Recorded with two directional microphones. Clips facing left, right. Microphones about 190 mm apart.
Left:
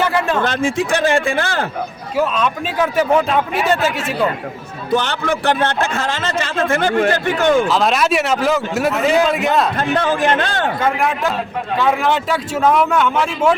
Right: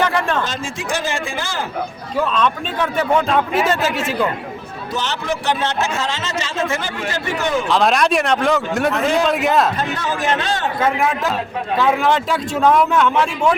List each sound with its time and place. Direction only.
0.0 s a sound: 5° left (ahead or behind)
0.4 s a man's voice: 60° left (ahead or behind)
2.1 s a man's voice: 5° left (ahead or behind)
4.9 s a man's voice: 55° left (ahead or behind)
7.7 s a man's voice: centre (ahead or behind)
9.7 s a man's voice: 55° left (ahead or behind)
10.8 s a man's voice: centre (ahead or behind)